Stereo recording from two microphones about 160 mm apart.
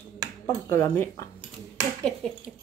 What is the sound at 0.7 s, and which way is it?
Speech, 15° left (ahead or behind).